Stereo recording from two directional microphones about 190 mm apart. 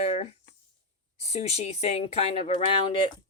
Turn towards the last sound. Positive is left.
turn(degrees=30)  # may be behind; listen again after turning